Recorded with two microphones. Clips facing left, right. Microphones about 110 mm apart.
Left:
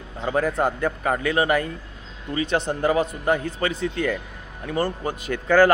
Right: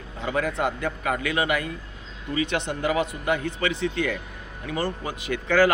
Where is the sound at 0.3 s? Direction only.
40° left (ahead or behind).